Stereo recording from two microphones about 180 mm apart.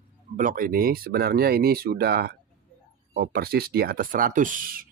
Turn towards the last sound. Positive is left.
turn(degrees=-50)  # may be behind; listen again after turning